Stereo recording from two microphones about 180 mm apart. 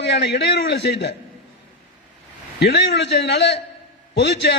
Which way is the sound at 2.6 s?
70° left (ahead or behind).